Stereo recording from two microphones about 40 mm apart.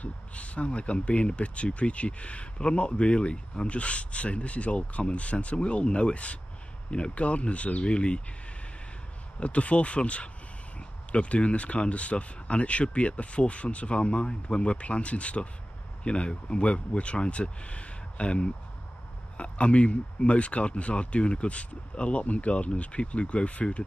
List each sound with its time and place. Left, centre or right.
0.0 s speech: left
9.4 s speech: left